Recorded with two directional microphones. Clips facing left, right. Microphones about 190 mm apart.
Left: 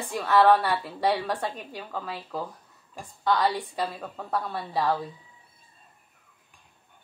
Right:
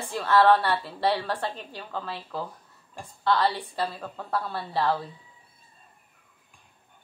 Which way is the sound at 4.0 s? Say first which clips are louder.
Even; centre (ahead or behind).